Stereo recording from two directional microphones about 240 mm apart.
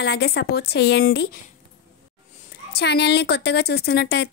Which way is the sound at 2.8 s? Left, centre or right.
Left.